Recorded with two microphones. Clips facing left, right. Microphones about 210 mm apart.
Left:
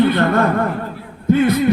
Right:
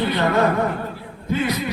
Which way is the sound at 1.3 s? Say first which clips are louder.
Left 9 dB; 55° left (ahead or behind).